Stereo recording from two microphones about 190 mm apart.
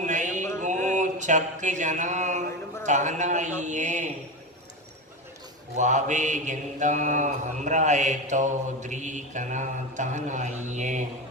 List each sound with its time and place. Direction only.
0.0 s a sound: 40° right (ahead or behind)
0.6 s mantra: 40° right (ahead or behind)
5.7 s mantra: 40° right (ahead or behind)